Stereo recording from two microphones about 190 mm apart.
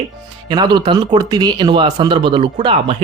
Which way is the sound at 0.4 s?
20° right (ahead or behind).